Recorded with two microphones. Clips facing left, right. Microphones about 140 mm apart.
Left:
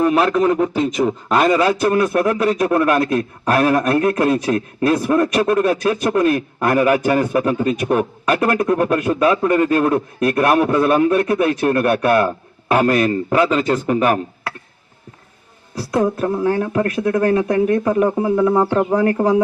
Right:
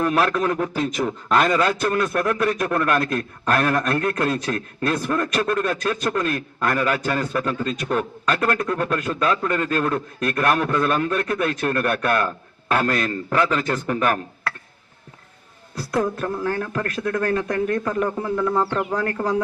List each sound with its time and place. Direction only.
0.0 s a man's voice: 5° left (ahead or behind)
15.9 s a man's voice: 20° left (ahead or behind)